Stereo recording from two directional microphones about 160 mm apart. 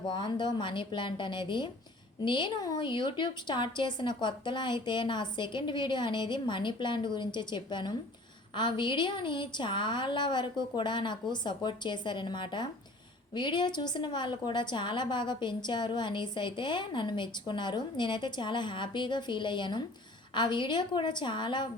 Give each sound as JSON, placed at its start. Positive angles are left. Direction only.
{"t": 0.1, "sound": "a woman's voice", "side_deg": 30}